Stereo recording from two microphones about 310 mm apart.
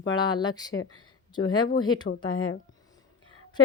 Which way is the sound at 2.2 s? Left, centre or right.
Left.